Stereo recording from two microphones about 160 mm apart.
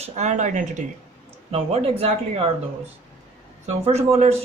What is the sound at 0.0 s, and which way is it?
Speech, 45° right (ahead or behind).